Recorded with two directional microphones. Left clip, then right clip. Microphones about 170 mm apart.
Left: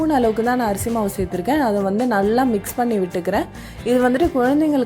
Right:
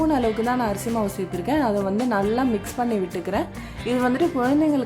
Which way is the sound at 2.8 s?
30° left (ahead or behind).